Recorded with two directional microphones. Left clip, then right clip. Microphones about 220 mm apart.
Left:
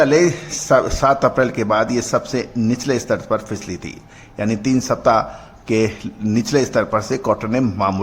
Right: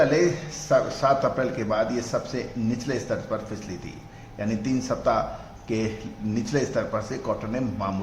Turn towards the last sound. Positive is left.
turn(degrees=40)  # may be behind; listen again after turning